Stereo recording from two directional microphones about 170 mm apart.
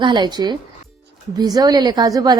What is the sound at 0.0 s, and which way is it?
A woman's voice, 25° right (ahead or behind).